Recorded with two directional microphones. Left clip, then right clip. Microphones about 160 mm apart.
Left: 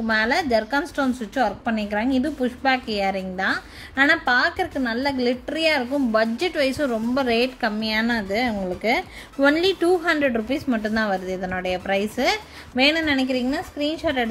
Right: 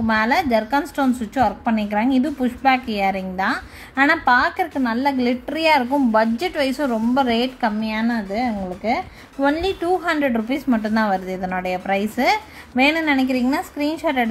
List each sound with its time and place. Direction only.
0.0 s a woman's voice: 5° left (ahead or behind)
7.8 s a woman's voice: 30° left (ahead or behind)
10.0 s a woman's voice: 15° left (ahead or behind)